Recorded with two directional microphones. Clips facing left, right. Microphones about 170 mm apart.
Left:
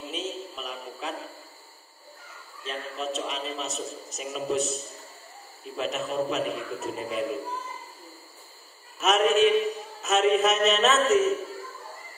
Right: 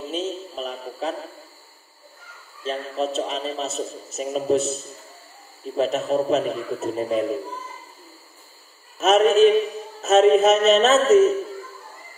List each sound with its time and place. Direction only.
0.6 s a sound: 35° right (ahead or behind)
2.6 s a man's voice: 35° right (ahead or behind)
4.6 s a man's voice: centre (ahead or behind)
5.8 s a man's voice: 35° right (ahead or behind)
9.0 s a man's voice: 35° right (ahead or behind)